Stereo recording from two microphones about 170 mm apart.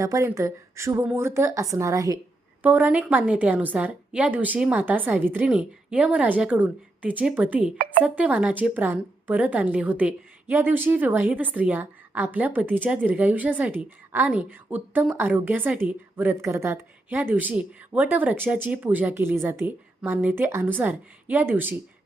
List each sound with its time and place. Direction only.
0.0 s a woman's voice: 20° right (ahead or behind)
2.6 s a woman's voice: 10° right (ahead or behind)